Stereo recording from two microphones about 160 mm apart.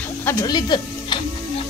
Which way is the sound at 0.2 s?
20° left (ahead or behind).